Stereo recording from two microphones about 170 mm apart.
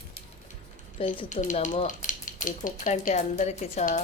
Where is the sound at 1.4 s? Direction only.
45° left (ahead or behind).